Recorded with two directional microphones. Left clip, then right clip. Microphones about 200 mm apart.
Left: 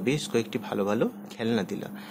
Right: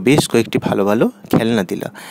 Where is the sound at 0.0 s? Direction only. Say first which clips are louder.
Right 13 dB; 45° right (ahead or behind).